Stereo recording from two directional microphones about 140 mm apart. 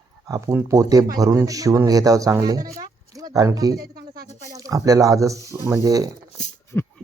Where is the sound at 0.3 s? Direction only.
25° right (ahead or behind).